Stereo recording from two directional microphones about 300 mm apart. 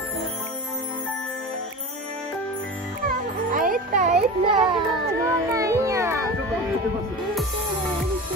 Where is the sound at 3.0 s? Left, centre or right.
Right.